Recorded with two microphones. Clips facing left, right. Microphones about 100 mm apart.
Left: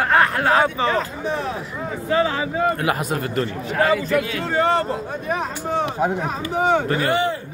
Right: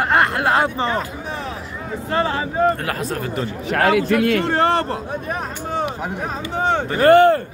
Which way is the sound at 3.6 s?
75° right (ahead or behind).